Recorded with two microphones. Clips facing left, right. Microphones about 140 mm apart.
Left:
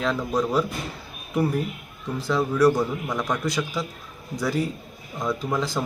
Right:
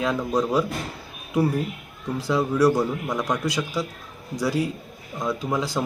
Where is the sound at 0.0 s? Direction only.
15° right (ahead or behind).